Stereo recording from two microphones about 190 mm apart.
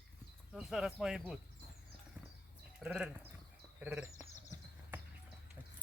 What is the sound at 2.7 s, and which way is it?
Speech, 5° right (ahead or behind).